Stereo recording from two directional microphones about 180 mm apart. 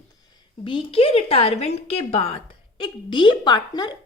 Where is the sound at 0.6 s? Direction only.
30° left (ahead or behind).